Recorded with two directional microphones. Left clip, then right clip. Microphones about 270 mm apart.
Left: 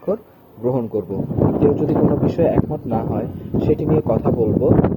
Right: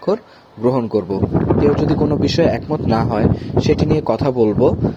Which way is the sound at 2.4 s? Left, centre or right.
Right.